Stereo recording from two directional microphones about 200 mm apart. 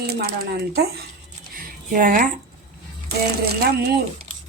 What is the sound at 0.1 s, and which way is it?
Speech, 50° right (ahead or behind).